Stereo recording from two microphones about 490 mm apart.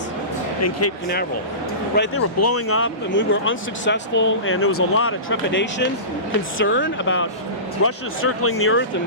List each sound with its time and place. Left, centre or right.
0.6 s speech: left